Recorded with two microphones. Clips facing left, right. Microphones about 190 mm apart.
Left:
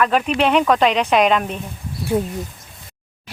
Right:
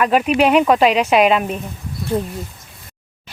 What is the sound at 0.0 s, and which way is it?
Speech, 10° right (ahead or behind).